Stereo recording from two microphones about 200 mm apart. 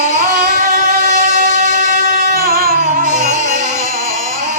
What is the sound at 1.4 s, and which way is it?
Music, 45° right (ahead or behind).